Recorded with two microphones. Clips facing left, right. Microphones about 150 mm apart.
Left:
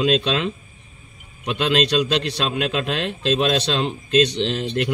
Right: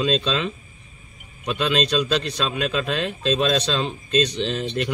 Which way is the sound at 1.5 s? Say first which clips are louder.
Left 2 dB; 90° left.